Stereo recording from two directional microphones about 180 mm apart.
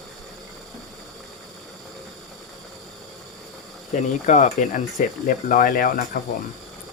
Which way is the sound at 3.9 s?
45° left (ahead or behind).